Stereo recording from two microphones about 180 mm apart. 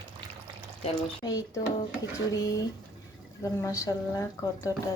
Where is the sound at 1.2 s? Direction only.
20° left (ahead or behind).